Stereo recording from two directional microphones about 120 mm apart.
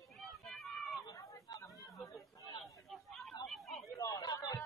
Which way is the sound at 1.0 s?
30° left (ahead or behind).